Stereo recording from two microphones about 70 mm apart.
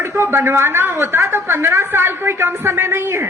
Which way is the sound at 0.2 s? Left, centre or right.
Right.